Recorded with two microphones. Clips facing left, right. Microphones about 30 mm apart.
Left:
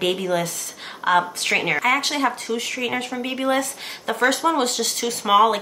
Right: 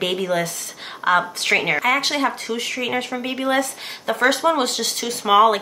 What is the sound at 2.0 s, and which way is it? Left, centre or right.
Speech, centre.